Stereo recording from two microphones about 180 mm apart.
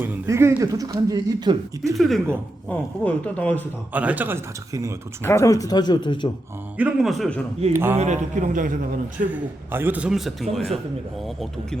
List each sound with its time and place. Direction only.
0.0 s speech: 15° right (ahead or behind)
2.0 s a man's voice: centre (ahead or behind)
3.9 s speech: 10° right (ahead or behind)
5.2 s speech: 15° left (ahead or behind)
6.7 s a man's voice: 5° right (ahead or behind)
7.7 s speech: 15° right (ahead or behind)
7.9 s a man's voice: 40° right (ahead or behind)
9.3 s a man's voice: 10° right (ahead or behind)